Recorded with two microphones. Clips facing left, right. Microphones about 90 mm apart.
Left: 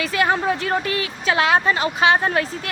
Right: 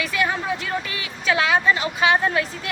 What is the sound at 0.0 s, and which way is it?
A woman's voice, 35° left (ahead or behind).